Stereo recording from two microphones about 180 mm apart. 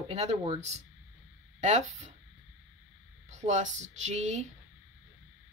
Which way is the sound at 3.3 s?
40° right (ahead or behind).